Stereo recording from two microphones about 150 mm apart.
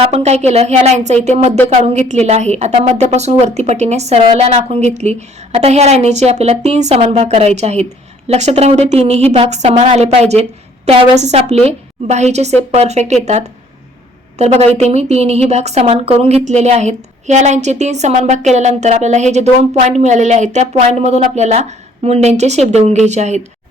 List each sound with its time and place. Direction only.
0.1 s a woman's voice: 45° right (ahead or behind)